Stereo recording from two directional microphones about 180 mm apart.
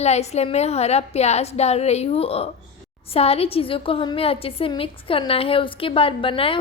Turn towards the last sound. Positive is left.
turn(degrees=30)  # may be behind; listen again after turning